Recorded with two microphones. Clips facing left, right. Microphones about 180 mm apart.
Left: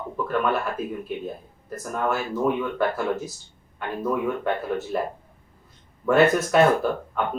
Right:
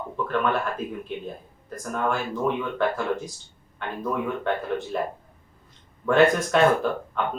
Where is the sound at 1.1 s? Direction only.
5° left (ahead or behind).